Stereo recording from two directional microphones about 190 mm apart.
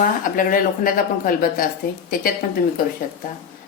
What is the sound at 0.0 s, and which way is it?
A woman's voice, 45° left (ahead or behind).